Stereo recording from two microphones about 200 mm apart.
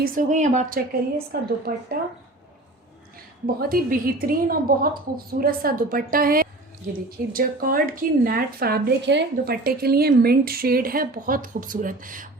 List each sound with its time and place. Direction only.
0.0 s a woman's voice: 40° right (ahead or behind)
1.3 s speech: 50° right (ahead or behind)
3.4 s speech: 50° right (ahead or behind)